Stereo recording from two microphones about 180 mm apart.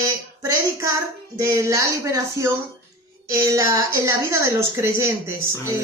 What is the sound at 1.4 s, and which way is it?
Speech, 15° right (ahead or behind).